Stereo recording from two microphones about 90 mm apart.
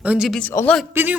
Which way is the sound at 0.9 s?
20° right (ahead or behind).